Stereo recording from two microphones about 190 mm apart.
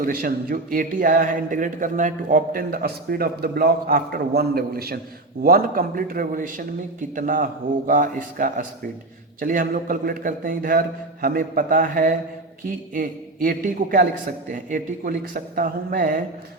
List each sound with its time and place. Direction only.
0.0 s speech: 50° right (ahead or behind)